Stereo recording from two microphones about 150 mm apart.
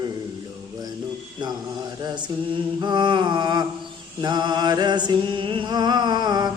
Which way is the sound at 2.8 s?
30° right (ahead or behind).